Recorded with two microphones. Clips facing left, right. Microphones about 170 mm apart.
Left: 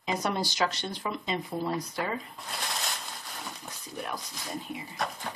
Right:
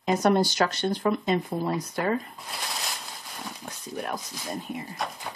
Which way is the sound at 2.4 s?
Centre (ahead or behind).